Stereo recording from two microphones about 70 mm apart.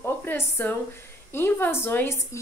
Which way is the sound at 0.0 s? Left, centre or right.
Left.